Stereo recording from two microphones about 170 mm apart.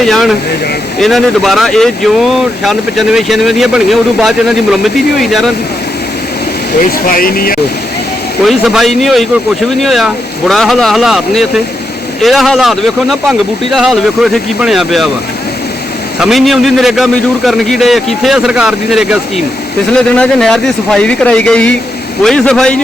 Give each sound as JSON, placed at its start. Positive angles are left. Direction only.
{"t": 0.0, "sound": "speech", "side_deg": 0}
{"t": 7.0, "sound": "speech", "side_deg": 55}
{"t": 8.4, "sound": "speech", "side_deg": 0}
{"t": 16.2, "sound": "speech", "side_deg": 0}